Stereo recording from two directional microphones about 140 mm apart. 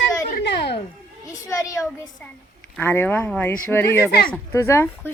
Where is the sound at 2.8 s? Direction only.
15° left (ahead or behind).